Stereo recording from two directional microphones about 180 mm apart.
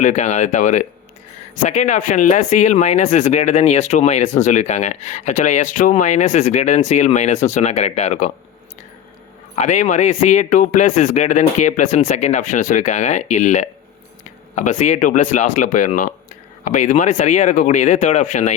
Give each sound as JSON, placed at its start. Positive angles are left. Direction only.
{"t": 0.0, "sound": "speech", "side_deg": 40}
{"t": 9.6, "sound": "speech", "side_deg": 40}